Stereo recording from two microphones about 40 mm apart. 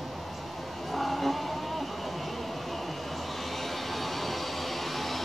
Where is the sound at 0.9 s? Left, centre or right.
Centre.